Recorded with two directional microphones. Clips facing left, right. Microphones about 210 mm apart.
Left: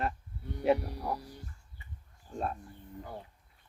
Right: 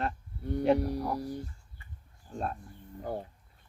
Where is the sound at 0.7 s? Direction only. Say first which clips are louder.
Right 6 dB; 45° right (ahead or behind).